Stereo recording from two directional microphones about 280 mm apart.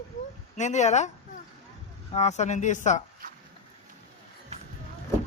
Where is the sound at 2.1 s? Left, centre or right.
Left.